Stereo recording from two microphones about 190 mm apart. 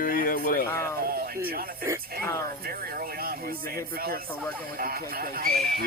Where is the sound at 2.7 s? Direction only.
50° right (ahead or behind).